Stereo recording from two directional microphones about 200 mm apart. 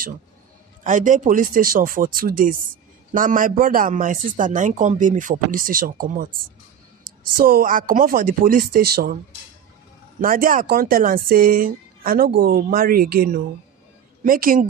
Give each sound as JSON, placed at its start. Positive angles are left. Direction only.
{"t": 0.8, "sound": "speech", "side_deg": -40}
{"t": 7.3, "sound": "speech", "side_deg": -45}
{"t": 10.2, "sound": "speech", "side_deg": -45}